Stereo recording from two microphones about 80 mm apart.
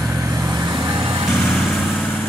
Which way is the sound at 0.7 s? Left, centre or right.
Right.